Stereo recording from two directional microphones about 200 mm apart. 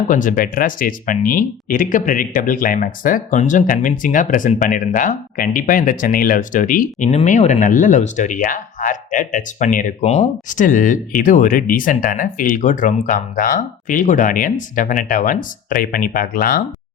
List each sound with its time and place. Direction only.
0.1 s speech: 40° left (ahead or behind)